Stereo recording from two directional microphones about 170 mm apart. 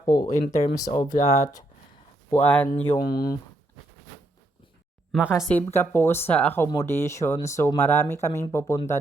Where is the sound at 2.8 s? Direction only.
25° left (ahead or behind).